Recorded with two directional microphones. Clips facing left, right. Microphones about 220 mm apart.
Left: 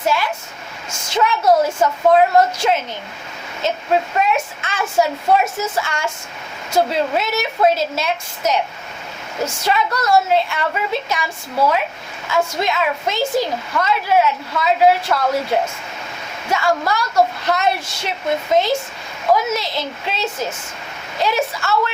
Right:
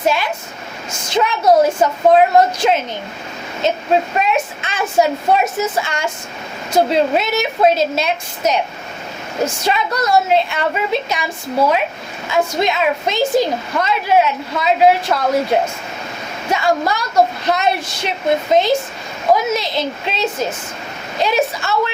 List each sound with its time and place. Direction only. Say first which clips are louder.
0.0 s a woman's voice: right 2 dB; 20° right (ahead or behind)
4.1 s a woman's voice: right 1 dB; 20° right (ahead or behind)